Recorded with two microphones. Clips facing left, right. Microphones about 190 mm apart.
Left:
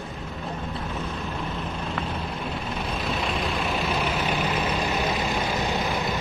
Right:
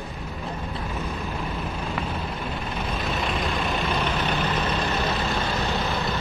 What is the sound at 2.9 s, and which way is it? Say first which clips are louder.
Vehicle: right 1 dB; centre (ahead or behind).